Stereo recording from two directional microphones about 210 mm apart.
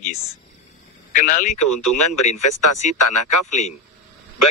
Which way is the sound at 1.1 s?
40° left (ahead or behind).